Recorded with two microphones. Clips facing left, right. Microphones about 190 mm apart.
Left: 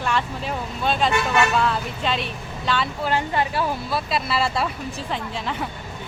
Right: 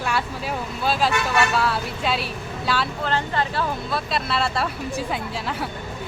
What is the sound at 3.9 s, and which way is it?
Speech, centre (ahead or behind).